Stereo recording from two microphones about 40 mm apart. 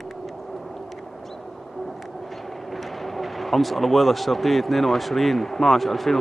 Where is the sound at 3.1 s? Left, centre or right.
Centre.